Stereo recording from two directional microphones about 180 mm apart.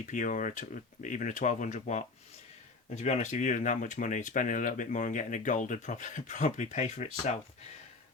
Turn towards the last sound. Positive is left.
turn(degrees=40)  # may be behind; listen again after turning